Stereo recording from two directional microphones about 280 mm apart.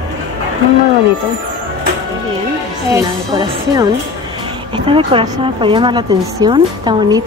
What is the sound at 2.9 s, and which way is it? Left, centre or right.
Speech, centre.